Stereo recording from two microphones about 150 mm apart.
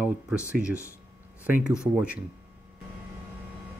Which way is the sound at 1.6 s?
5° right (ahead or behind).